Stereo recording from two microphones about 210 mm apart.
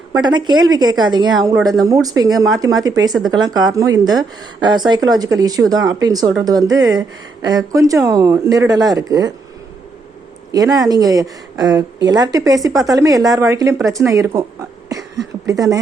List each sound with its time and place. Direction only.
0.1 s a woman's voice: 20° right (ahead or behind)
10.5 s a woman's voice: 15° right (ahead or behind)
15.4 s speech: 15° right (ahead or behind)